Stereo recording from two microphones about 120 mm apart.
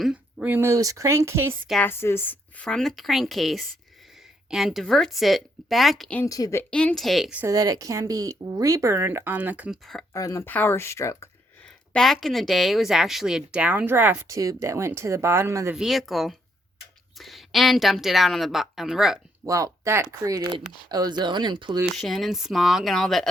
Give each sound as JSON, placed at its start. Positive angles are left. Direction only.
{"t": 0.0, "sound": "speech", "side_deg": -5}
{"t": 1.8, "sound": "a woman's voice", "side_deg": 20}
{"t": 6.2, "sound": "speech", "side_deg": 30}
{"t": 6.6, "sound": "a woman's voice", "side_deg": 10}
{"t": 7.4, "sound": "speech", "side_deg": -30}
{"t": 10.1, "sound": "speech", "side_deg": 25}
{"t": 11.9, "sound": "a woman's voice", "side_deg": 0}
{"t": 14.3, "sound": "speech", "side_deg": -30}
{"t": 15.7, "sound": "a woman's voice", "side_deg": -5}
{"t": 19.5, "sound": "speech", "side_deg": -25}
{"t": 21.9, "sound": "a woman's voice", "side_deg": 0}